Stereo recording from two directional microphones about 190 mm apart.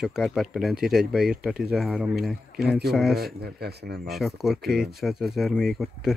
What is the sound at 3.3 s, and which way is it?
Speech, 55° right (ahead or behind).